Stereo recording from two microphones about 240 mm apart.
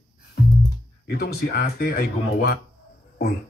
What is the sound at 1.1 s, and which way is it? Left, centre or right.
Speech, left.